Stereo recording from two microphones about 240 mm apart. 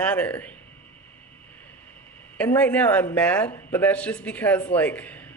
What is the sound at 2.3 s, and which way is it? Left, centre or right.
A woman's voice, centre.